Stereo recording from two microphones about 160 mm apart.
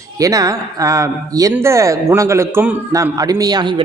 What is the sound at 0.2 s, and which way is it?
Speech, 20° right (ahead or behind).